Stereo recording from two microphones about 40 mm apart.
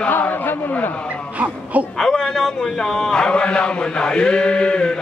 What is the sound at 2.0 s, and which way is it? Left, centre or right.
A man's voice, centre.